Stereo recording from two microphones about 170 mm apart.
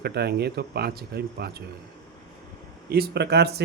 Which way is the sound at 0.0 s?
70° right (ahead or behind).